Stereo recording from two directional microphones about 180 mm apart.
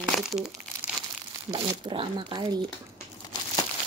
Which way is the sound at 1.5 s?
30° right (ahead or behind).